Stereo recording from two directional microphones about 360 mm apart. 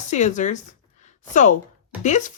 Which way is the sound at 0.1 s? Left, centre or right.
Centre.